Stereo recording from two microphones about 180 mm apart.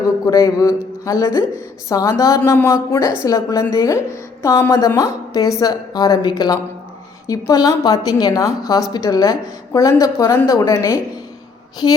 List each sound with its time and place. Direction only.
0.3 s a woman's voice: 20° left (ahead or behind)